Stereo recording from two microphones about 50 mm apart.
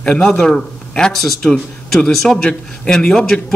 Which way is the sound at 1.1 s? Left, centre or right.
Centre.